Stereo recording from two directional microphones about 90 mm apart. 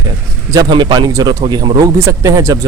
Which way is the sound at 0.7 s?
60° right (ahead or behind).